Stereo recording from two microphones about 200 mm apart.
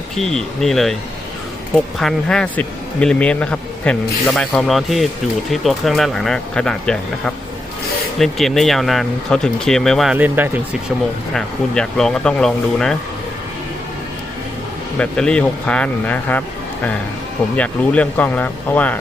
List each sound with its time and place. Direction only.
0.2 s speech: centre (ahead or behind)
11.3 s speech: 5° left (ahead or behind)
14.9 s speech: 5° left (ahead or behind)
17.6 s speech: 5° left (ahead or behind)